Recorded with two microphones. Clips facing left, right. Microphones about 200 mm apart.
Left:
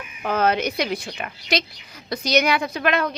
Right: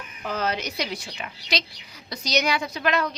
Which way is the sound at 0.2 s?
55° left (ahead or behind).